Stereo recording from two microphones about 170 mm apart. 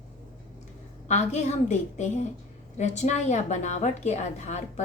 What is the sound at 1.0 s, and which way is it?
A woman's voice, 40° left (ahead or behind).